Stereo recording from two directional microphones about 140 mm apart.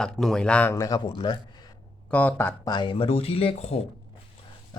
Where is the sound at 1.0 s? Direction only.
35° left (ahead or behind).